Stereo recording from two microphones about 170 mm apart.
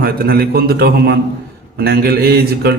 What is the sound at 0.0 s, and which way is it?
A man's voice, 65° right (ahead or behind).